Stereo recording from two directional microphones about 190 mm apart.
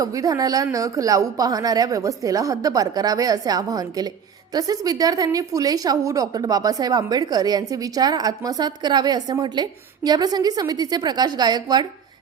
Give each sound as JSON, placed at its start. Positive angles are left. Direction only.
{"t": 0.0, "sound": "a woman's voice", "side_deg": -20}